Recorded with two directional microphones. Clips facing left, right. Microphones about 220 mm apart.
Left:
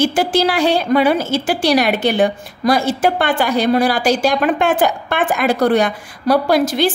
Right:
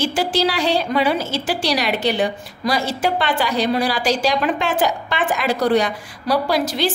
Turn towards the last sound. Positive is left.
turn(degrees=50)  # may be behind; listen again after turning